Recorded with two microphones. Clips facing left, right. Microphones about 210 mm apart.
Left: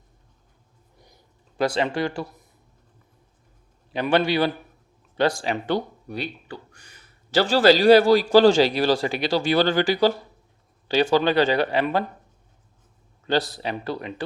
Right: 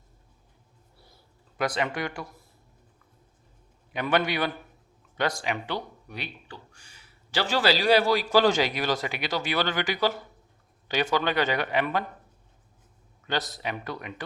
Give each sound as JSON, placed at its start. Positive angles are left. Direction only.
{"t": 0.9, "sound": "a sound", "side_deg": 15}
{"t": 1.5, "sound": "speech", "side_deg": 30}
{"t": 4.1, "sound": "speech", "side_deg": 30}
{"t": 7.3, "sound": "speech", "side_deg": 35}
{"t": 13.2, "sound": "speech", "side_deg": 30}